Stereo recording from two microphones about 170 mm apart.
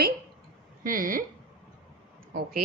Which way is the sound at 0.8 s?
55° right (ahead or behind).